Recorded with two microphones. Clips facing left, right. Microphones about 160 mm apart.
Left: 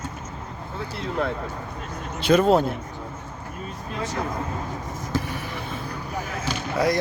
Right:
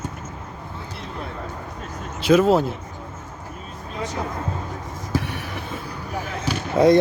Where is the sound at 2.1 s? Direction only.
5° right (ahead or behind).